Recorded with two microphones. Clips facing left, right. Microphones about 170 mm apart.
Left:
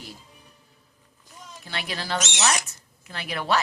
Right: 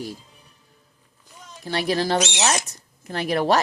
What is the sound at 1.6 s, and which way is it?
Speech, 40° right (ahead or behind).